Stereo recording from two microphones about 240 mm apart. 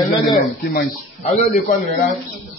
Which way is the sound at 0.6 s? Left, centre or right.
Left.